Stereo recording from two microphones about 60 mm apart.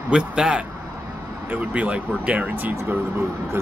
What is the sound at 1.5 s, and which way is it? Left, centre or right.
Speech, right.